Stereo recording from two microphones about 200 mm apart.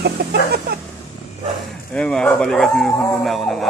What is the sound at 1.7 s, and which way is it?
Speech, 5° left (ahead or behind).